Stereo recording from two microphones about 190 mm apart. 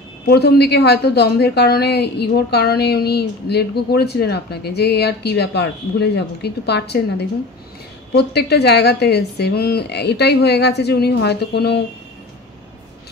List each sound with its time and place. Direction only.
0.3 s a woman's voice: 60° left (ahead or behind)